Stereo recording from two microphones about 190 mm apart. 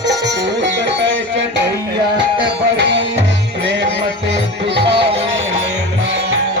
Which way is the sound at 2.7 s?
70° right (ahead or behind).